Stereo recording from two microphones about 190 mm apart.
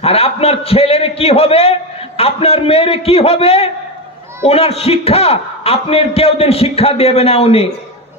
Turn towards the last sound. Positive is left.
turn(degrees=30)  # may be behind; listen again after turning